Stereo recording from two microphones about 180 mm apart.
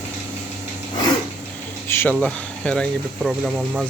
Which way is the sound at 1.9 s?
15° left (ahead or behind).